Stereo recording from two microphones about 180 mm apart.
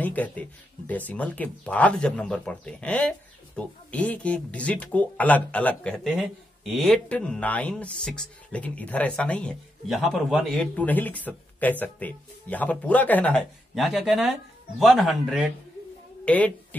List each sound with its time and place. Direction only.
0.0 s speech: 10° left (ahead or behind)